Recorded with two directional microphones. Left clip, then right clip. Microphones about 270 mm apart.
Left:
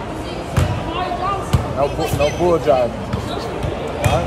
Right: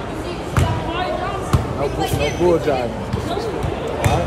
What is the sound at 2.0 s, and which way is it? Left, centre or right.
Speech, centre.